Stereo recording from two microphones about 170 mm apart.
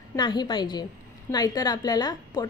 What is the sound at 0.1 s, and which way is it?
A woman's voice, 25° left (ahead or behind).